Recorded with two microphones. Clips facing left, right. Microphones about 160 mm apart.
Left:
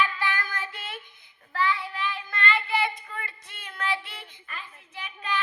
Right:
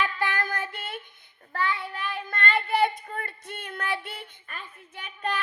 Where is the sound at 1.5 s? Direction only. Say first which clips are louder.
Left 2 dB; 50° right (ahead or behind).